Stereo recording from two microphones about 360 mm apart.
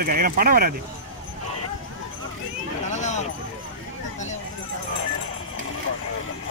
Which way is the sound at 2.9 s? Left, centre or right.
Centre.